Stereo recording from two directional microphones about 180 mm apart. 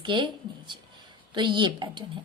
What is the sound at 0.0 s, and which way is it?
Speech, 25° right (ahead or behind).